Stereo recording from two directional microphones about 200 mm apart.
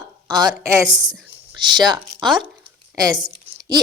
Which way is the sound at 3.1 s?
20° right (ahead or behind).